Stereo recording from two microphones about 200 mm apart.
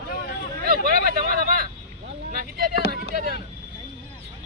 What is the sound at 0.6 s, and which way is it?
Vehicle, 45° right (ahead or behind).